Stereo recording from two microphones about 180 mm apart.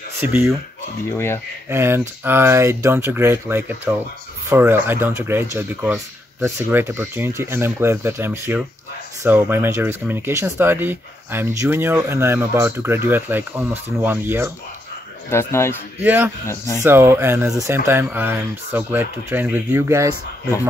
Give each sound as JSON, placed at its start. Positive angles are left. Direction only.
{"t": 0.2, "sound": "speech", "side_deg": -10}
{"t": 1.1, "sound": "speech", "side_deg": 15}
{"t": 1.7, "sound": "speech", "side_deg": -15}
{"t": 15.2, "sound": "speech", "side_deg": 15}
{"t": 16.0, "sound": "speech", "side_deg": -10}
{"t": 16.4, "sound": "speech", "side_deg": 15}
{"t": 16.8, "sound": "speech", "side_deg": -15}